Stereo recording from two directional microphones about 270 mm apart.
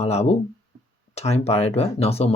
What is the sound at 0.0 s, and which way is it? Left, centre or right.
Speech, left.